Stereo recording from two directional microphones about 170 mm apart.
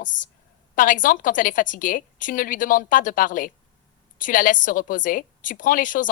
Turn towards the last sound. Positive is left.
turn(degrees=50)  # may be behind; listen again after turning